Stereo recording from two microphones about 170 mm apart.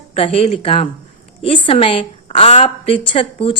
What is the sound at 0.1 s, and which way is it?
A woman's voice, 35° left (ahead or behind).